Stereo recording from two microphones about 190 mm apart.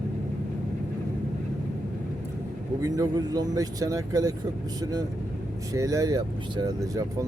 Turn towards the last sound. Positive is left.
turn(degrees=-20)  # may be behind; listen again after turning